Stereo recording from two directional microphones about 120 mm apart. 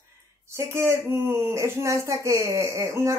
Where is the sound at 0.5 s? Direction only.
20° right (ahead or behind).